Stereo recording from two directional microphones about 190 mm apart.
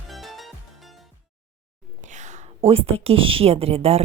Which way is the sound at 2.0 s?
40° right (ahead or behind).